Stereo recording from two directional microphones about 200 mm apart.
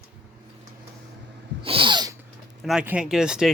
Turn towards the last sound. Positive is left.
turn(degrees=-5)  # may be behind; listen again after turning